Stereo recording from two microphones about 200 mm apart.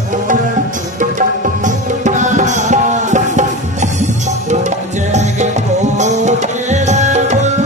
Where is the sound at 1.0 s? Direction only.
40° right (ahead or behind).